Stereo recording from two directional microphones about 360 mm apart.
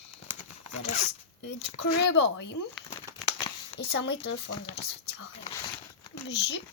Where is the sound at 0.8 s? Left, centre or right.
Centre.